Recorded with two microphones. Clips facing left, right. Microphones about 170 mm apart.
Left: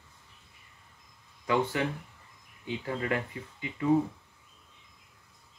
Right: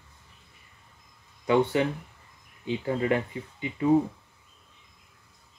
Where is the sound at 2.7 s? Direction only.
25° right (ahead or behind).